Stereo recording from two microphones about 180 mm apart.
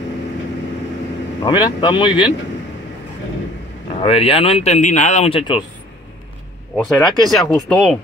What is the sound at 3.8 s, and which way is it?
Speech, 30° left (ahead or behind).